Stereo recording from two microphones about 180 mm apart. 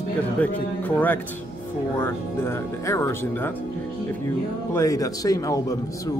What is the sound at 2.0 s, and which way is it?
Speech, 15° left (ahead or behind).